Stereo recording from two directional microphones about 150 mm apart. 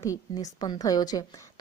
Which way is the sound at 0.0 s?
25° left (ahead or behind).